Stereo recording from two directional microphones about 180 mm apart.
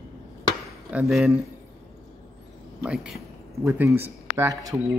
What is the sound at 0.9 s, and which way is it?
Speech, 5° right (ahead or behind).